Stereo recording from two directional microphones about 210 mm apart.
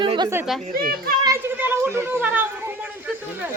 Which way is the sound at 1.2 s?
15° right (ahead or behind).